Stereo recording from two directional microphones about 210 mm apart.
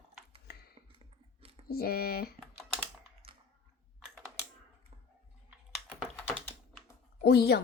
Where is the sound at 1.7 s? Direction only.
45° left (ahead or behind).